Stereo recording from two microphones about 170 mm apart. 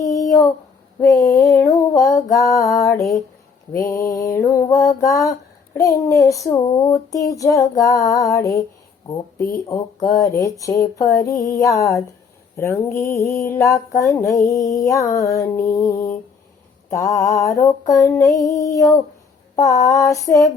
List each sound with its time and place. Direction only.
0.0 s a sound: 20° left (ahead or behind)
1.0 s mantra: 20° left (ahead or behind)
9.6 s mantra: 20° left (ahead or behind)